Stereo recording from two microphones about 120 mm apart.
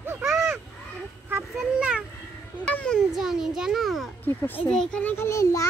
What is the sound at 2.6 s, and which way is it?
Children playing, 10° left (ahead or behind).